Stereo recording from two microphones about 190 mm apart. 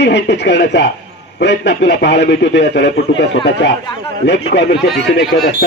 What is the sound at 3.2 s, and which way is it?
A man's voice, 65° left (ahead or behind).